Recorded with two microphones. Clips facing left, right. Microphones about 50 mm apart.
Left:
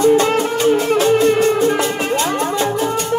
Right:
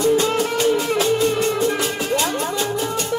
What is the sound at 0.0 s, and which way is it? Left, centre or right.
Music, left.